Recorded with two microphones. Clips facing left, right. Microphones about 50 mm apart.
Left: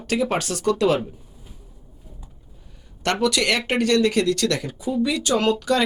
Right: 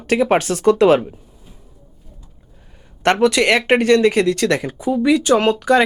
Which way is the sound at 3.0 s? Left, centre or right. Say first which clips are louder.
Right 7 dB; right.